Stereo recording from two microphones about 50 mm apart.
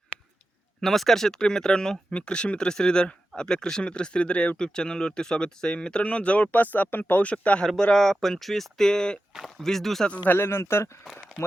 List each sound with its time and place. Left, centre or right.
0.8 s speech: centre; by 7.6 s left
7.9 s speech: centre
9.3 s speech: centre
10.2 s speech: left
11.0 s speech: centre